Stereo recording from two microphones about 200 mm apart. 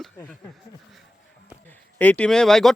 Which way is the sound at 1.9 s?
5° left (ahead or behind).